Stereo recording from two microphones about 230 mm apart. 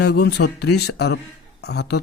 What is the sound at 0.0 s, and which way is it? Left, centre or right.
Speech, left.